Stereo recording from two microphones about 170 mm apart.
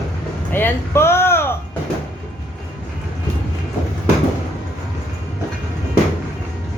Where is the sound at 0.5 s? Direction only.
15° left (ahead or behind).